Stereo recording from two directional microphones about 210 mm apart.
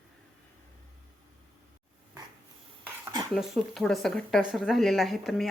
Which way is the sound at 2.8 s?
15° right (ahead or behind).